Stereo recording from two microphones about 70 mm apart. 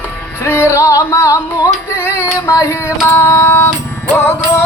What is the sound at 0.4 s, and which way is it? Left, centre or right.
Music, left.